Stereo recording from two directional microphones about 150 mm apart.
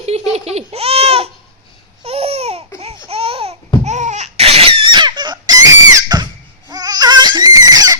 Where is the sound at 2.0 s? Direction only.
45° right (ahead or behind).